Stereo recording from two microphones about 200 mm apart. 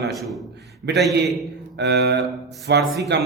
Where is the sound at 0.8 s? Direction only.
55° right (ahead or behind).